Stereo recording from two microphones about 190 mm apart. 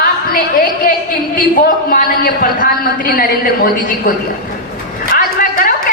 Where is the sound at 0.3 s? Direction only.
50° left (ahead or behind).